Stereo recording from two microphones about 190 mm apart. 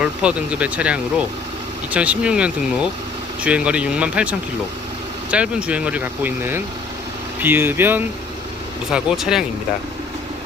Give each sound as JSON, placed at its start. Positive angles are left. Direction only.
{"t": 0.0, "sound": "speech", "side_deg": -5}